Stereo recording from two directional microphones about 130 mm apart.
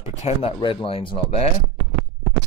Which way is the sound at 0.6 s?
40° left (ahead or behind).